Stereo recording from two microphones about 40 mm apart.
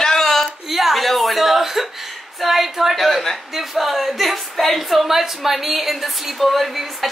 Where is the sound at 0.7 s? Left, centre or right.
Centre.